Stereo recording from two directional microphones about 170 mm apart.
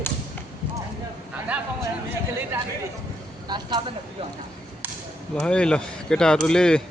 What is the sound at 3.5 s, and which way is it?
Speech, 25° right (ahead or behind).